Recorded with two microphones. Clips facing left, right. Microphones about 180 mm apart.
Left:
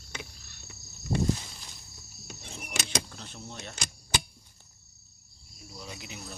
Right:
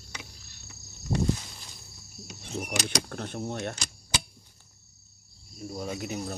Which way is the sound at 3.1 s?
55° right (ahead or behind).